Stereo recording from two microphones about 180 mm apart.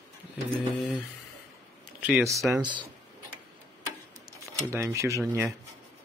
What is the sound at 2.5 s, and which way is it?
Speech, 25° right (ahead or behind).